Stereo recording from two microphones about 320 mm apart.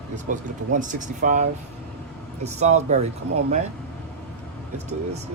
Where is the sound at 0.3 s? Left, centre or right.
Right.